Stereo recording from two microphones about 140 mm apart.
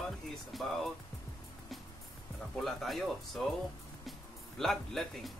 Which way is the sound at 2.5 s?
Centre (ahead or behind).